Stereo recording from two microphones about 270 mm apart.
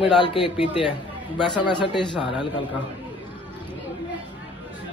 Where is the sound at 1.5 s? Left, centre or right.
Centre.